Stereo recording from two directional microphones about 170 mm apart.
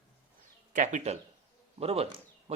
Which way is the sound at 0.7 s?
45° right (ahead or behind).